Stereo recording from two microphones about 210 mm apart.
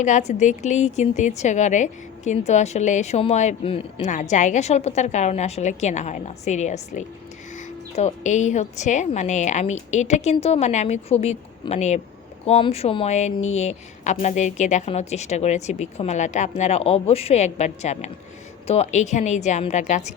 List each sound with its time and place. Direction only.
0.0 s a woman's voice: 35° left (ahead or behind)